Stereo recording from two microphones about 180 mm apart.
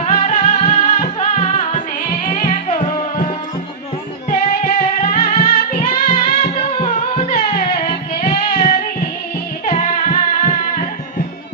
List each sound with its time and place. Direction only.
0.0 s music: 40° left (ahead or behind)
5.8 s music: 30° left (ahead or behind)